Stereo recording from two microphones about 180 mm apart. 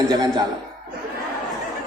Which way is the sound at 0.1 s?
20° right (ahead or behind).